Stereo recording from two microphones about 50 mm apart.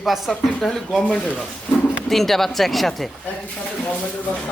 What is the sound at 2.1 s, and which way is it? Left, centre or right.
Speech, centre.